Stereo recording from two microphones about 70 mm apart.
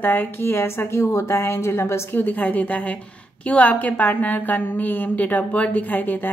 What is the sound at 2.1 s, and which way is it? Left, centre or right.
A woman's voice, left.